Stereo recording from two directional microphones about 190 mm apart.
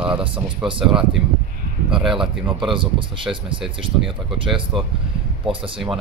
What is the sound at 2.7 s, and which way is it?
Speech, 25° right (ahead or behind).